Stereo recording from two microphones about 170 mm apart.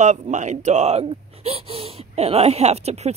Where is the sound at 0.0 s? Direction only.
45° right (ahead or behind).